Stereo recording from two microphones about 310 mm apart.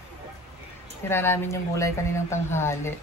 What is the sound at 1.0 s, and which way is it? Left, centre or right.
A woman's voice, centre.